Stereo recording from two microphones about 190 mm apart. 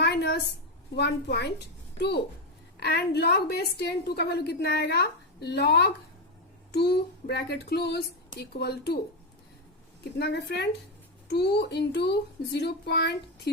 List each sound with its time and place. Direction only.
0.0 s a sound: 60° left (ahead or behind)
0.9 s a woman's voice: 65° left (ahead or behind)
7.3 s a woman's voice: 55° left (ahead or behind)
10.2 s a woman's voice: 60° left (ahead or behind)